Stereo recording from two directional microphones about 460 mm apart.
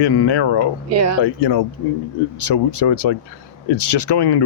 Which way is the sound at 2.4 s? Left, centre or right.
Left.